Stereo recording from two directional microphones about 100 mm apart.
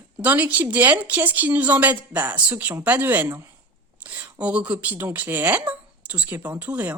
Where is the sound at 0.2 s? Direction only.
15° right (ahead or behind).